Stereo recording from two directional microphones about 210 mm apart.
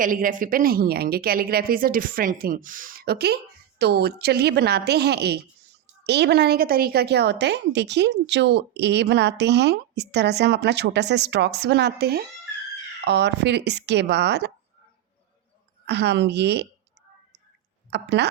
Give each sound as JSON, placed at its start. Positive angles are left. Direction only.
{"t": 0.0, "sound": "a woman's voice", "side_deg": -40}
{"t": 15.9, "sound": "a woman's voice", "side_deg": -55}
{"t": 17.9, "sound": "a woman's voice", "side_deg": -55}